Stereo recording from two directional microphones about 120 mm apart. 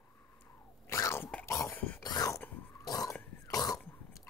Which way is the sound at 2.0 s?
30° left (ahead or behind).